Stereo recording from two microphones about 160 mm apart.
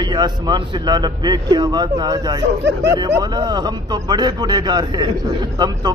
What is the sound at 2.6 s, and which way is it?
Speech, 90° right.